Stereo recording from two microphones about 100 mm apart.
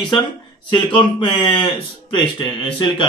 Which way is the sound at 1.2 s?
55° left (ahead or behind).